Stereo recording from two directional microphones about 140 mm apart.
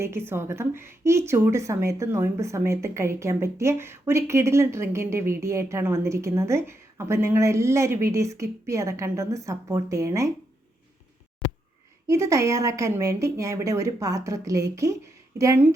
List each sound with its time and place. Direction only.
0.0 s a woman's voice: 15° right (ahead or behind)
12.0 s a woman's voice: 20° right (ahead or behind)